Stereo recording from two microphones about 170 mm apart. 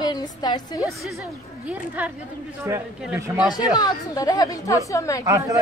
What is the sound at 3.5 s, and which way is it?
A woman's voice, 25° left (ahead or behind).